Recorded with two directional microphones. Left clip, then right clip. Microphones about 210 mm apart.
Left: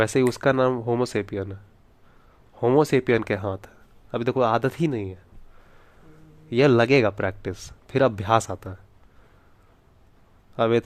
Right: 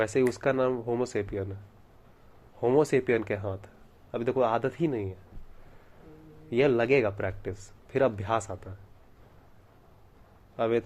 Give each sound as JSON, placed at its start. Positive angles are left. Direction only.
{"t": 0.0, "sound": "speech", "side_deg": 45}
{"t": 2.6, "sound": "speech", "side_deg": 40}
{"t": 6.5, "sound": "speech", "side_deg": 45}
{"t": 10.6, "sound": "speech", "side_deg": 45}